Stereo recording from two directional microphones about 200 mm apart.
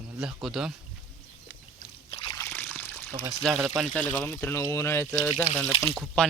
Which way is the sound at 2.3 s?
10° left (ahead or behind).